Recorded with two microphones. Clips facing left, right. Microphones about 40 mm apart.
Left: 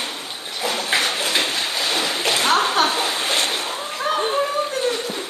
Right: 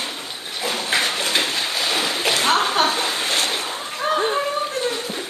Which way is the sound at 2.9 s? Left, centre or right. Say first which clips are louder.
Left 1 dB; centre.